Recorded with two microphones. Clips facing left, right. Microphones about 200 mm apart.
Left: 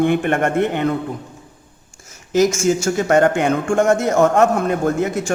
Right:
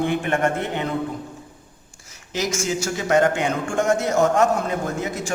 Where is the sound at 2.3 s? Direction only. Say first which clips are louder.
Left 9 dB; 50° left (ahead or behind).